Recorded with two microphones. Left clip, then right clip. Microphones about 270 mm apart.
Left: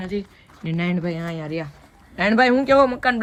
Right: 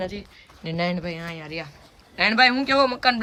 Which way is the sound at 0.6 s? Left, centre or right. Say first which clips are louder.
Right 1 dB; centre.